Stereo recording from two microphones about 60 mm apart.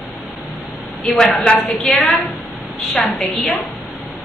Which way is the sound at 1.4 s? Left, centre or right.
Centre.